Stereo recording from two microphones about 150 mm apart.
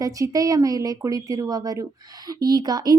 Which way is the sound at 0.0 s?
25° right (ahead or behind).